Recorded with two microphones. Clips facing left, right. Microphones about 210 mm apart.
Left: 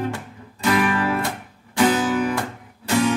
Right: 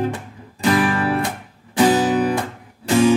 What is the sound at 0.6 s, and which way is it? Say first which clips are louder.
Music: right 2 dB; 30° right (ahead or behind).